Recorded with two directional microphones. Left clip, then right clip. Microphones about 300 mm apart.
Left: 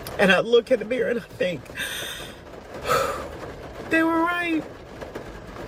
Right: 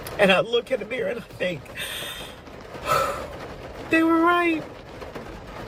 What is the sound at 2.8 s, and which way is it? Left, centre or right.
Gasp, centre.